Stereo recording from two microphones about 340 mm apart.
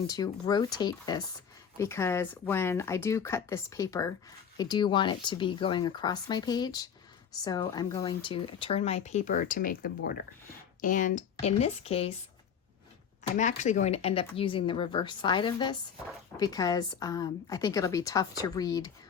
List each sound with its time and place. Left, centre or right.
0.1 s speech: centre
13.3 s speech: left